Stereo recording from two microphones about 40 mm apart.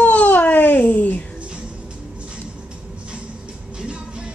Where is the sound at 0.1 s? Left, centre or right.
Left.